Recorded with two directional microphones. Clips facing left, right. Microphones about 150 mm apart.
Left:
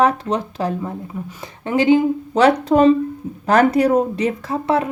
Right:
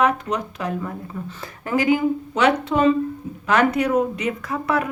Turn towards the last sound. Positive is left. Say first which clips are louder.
# left 4 dB
turn(degrees=30)  # may be behind; listen again after turning